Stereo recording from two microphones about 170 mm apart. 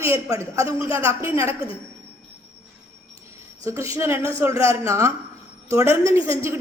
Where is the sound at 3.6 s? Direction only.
20° right (ahead or behind).